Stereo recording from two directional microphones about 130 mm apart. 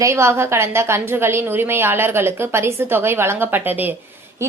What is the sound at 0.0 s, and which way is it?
A woman's voice, 20° right (ahead or behind).